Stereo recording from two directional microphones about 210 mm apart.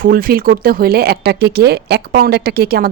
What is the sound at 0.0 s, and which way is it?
Speech, 45° right (ahead or behind).